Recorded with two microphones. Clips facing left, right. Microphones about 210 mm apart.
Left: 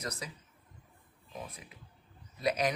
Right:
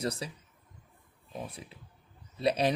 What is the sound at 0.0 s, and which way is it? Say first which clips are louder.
Speech: right 7 dB; 30° right (ahead or behind).